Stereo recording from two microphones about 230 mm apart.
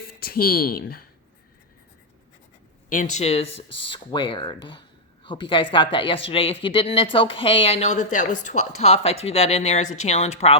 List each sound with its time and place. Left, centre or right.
0.2 s speech: left
2.9 s speech: left